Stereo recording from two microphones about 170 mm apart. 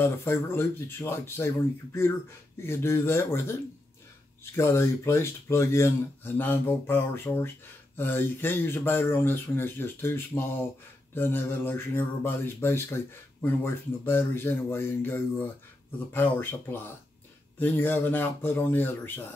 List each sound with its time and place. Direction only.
0.0 s speech: 15° left (ahead or behind)
2.6 s speech: 15° left (ahead or behind)